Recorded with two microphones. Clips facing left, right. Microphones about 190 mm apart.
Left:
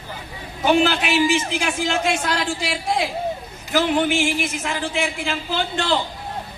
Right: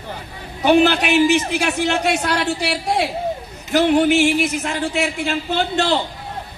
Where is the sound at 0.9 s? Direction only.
40° right (ahead or behind).